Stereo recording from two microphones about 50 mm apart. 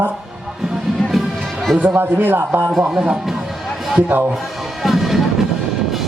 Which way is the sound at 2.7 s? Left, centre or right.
Centre.